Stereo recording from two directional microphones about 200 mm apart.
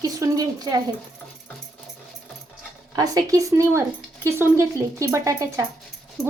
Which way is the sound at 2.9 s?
20° right (ahead or behind).